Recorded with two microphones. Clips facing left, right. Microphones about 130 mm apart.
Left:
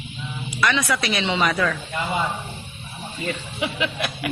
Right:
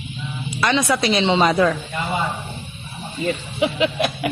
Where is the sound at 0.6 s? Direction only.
25° right (ahead or behind).